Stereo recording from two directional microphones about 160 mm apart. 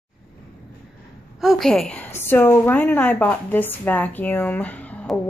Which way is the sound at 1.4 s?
Centre (ahead or behind).